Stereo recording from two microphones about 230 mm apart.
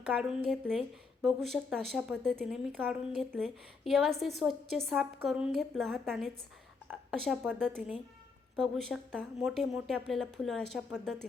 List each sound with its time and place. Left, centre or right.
0.0 s speech: centre